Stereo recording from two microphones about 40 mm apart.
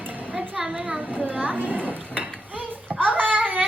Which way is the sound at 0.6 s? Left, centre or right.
Right.